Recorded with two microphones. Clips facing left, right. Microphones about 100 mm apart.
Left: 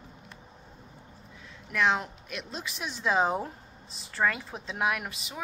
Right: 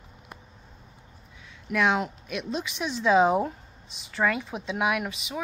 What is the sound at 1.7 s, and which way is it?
Speech, 5° right (ahead or behind).